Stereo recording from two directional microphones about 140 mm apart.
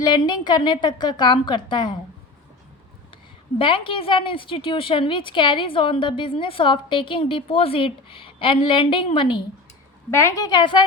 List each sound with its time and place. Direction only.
0.3 s a woman's voice: 30° left (ahead or behind)
3.6 s a woman's voice: 35° left (ahead or behind)
10.1 s a woman's voice: 20° left (ahead or behind); by 10.8 s 35° left (ahead or behind)